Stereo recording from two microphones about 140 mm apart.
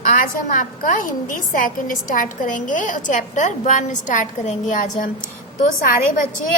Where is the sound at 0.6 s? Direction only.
75° left (ahead or behind).